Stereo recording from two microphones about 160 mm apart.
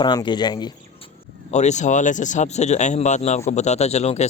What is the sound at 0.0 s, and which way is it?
Speech, 30° left (ahead or behind).